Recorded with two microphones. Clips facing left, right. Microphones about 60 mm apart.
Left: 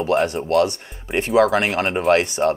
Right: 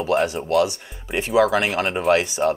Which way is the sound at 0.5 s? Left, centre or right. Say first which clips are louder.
Left 1 dB; left.